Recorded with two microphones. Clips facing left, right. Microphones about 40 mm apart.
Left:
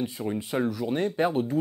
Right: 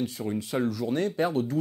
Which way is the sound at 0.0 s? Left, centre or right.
Centre.